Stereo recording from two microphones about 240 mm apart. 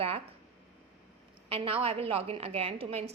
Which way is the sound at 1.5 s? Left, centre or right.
Right.